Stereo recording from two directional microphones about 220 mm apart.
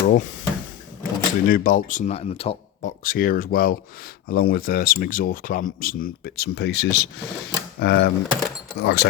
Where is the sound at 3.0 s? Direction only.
40° left (ahead or behind).